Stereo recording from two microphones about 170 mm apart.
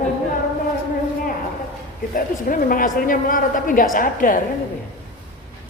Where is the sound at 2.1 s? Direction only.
55° left (ahead or behind).